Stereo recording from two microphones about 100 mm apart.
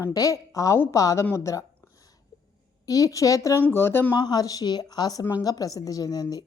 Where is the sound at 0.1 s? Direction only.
35° left (ahead or behind).